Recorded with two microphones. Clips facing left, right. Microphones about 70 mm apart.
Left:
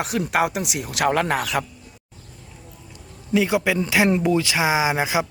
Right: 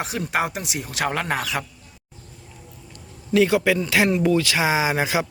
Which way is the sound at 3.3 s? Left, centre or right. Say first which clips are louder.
Right 2 dB; centre.